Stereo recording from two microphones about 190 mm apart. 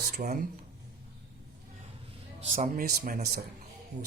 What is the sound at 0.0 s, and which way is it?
Speech, 50° right (ahead or behind).